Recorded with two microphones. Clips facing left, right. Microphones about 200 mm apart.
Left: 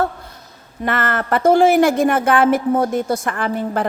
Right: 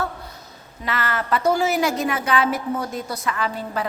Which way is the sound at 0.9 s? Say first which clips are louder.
Left 4 dB; 50° left (ahead or behind).